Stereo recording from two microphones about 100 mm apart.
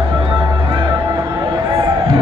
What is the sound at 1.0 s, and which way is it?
Music, 35° right (ahead or behind).